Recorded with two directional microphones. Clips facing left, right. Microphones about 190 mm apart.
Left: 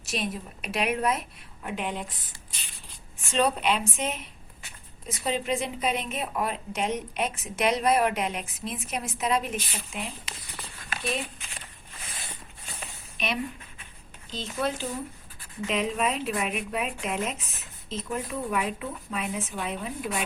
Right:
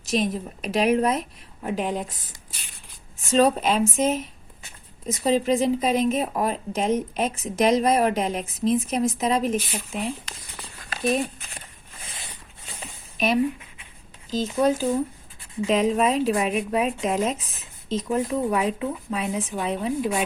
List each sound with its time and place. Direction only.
0.1 s a woman's voice: 35° right (ahead or behind)
3.3 s a woman's voice: 40° right (ahead or behind)
5.2 s a woman's voice: 35° right (ahead or behind)
10.3 s a sound: 5° left (ahead or behind)
11.0 s speech: 45° right (ahead or behind)
13.1 s a woman's voice: 45° right (ahead or behind); by 20.2 s 30° right (ahead or behind)